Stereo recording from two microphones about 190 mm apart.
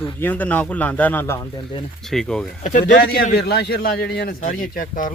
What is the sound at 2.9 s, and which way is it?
A man's voice, 50° left (ahead or behind).